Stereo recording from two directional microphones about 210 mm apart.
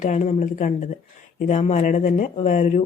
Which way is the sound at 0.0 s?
35° left (ahead or behind).